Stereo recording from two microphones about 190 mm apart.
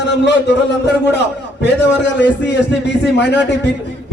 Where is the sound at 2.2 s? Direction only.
70° left (ahead or behind).